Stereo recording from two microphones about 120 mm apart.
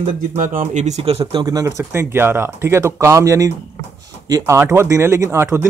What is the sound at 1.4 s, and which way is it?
Speech, 30° right (ahead or behind).